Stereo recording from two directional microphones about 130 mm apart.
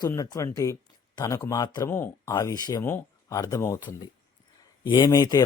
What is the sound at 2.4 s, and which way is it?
Speech, 30° left (ahead or behind).